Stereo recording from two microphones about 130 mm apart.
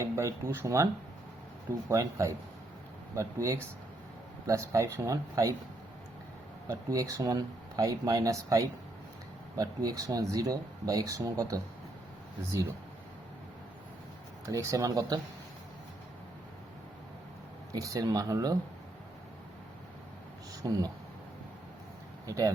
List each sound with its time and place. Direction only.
0.0 s speech: 25° right (ahead or behind)
1.9 s speech: 25° right (ahead or behind)
6.7 s speech: 25° right (ahead or behind)
14.4 s speech: 25° right (ahead or behind)
17.7 s speech: 25° right (ahead or behind)
20.6 s speech: 30° right (ahead or behind)
22.3 s speech: 25° right (ahead or behind)